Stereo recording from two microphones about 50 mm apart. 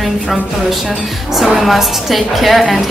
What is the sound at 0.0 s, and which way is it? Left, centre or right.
Speech, centre.